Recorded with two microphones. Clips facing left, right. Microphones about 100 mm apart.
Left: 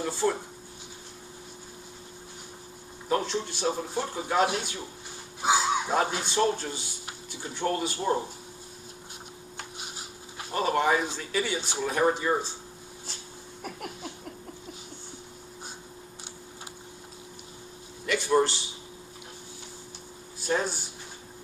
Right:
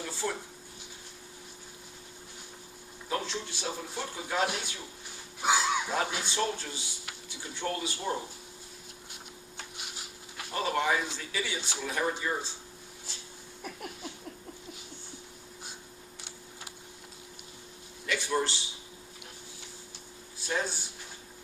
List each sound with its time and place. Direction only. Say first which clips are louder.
0.0 s speech: left 7 dB; 45° left (ahead or behind)
3.1 s speech: left 6 dB; 40° left (ahead or behind)
9.6 s speech: left 3 dB; 40° left (ahead or behind)
13.6 s a sound: left 3 dB; 50° left (ahead or behind)
18.0 s a sound: left 6 dB; 45° left (ahead or behind)
20.5 s speech: left 5 dB; 45° left (ahead or behind)